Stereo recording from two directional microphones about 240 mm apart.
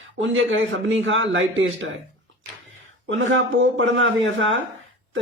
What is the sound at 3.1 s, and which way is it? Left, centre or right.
A man's voice, right.